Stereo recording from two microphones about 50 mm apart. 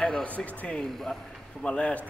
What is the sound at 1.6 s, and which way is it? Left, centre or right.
Speech, left.